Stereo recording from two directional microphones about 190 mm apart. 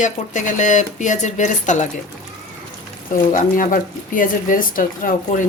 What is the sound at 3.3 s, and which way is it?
Speech, 45° left (ahead or behind).